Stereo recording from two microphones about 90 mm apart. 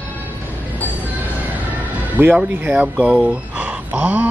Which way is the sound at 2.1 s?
20° right (ahead or behind).